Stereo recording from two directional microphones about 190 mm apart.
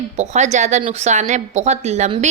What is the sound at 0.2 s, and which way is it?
A woman's voice, 35° right (ahead or behind).